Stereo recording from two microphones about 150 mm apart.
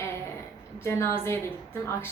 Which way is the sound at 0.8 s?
15° left (ahead or behind).